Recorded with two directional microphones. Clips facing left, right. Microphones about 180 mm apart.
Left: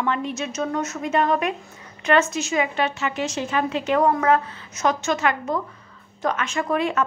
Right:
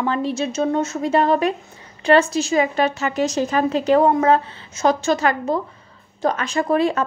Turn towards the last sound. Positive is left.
turn(degrees=-35)  # may be behind; listen again after turning